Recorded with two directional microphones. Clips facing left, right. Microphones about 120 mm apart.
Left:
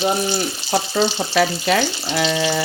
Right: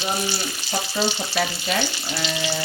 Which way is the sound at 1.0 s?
90° left.